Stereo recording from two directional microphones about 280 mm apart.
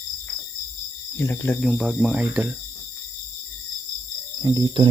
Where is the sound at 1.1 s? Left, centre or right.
Centre.